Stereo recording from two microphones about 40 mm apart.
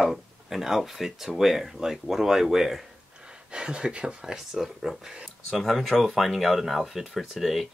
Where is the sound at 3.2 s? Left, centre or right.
Right.